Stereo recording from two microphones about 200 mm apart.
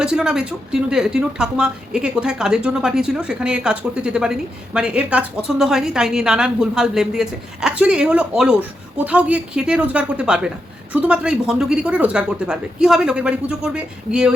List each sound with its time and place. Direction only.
0.0 s a woman's voice: 5° right (ahead or behind)